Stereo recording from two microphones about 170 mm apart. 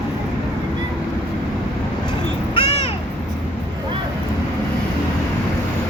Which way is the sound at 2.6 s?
35° left (ahead or behind).